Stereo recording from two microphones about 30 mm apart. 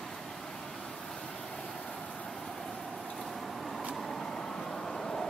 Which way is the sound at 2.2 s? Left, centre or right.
Centre.